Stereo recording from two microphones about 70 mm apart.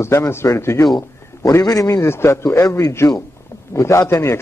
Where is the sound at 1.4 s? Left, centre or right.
Left.